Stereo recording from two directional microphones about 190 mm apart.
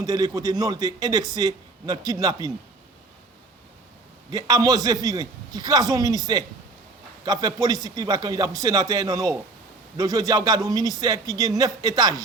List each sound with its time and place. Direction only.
0.0 s a man's voice: 20° right (ahead or behind)
4.3 s a man's voice: 20° right (ahead or behind)